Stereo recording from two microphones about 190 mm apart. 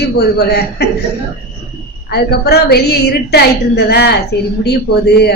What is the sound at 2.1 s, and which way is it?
A woman's voice, 60° left (ahead or behind).